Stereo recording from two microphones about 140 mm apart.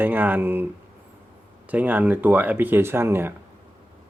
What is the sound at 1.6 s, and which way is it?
Speech, 10° right (ahead or behind).